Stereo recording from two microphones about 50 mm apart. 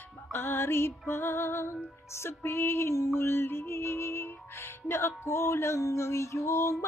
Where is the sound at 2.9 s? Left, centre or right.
Left.